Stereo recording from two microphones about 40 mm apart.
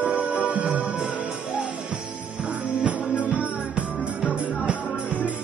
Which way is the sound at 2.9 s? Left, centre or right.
Right.